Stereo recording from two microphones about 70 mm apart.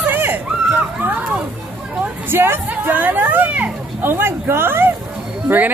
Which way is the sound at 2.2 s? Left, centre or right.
Right.